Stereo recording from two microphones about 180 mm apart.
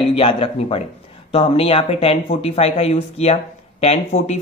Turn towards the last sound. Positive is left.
turn(degrees=35)  # may be behind; listen again after turning